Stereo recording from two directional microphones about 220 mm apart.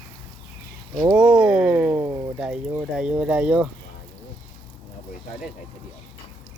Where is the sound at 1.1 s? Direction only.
5° right (ahead or behind).